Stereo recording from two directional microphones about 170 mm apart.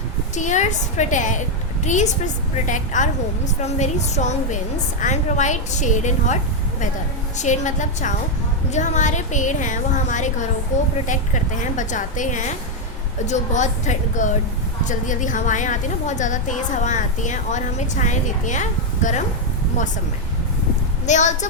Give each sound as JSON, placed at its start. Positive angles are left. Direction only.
{"t": 0.3, "sound": "a woman's voice", "side_deg": 45}
{"t": 21.1, "sound": "a woman's voice", "side_deg": 45}